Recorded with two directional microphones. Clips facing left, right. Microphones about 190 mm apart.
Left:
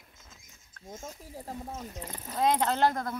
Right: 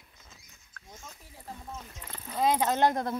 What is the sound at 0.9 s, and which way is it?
Speech, 45° left (ahead or behind).